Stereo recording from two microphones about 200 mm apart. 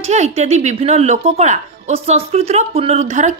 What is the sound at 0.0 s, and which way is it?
A woman's voice, 35° right (ahead or behind).